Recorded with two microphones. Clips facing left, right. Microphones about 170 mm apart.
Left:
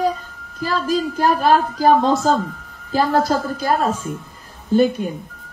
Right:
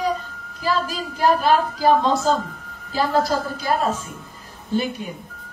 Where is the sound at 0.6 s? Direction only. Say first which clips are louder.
Left 4 dB; 50° left (ahead or behind).